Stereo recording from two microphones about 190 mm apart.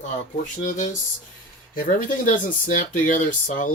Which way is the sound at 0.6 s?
45° left (ahead or behind).